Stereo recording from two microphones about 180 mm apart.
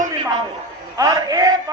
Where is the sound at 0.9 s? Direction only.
20° right (ahead or behind).